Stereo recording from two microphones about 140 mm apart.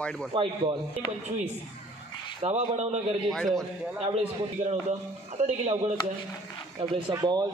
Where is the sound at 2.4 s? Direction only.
50° right (ahead or behind).